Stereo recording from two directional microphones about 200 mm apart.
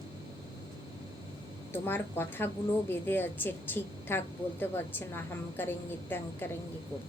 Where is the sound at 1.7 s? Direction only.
10° left (ahead or behind).